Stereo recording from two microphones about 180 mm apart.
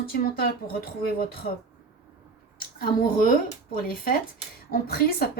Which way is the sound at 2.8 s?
50° left (ahead or behind).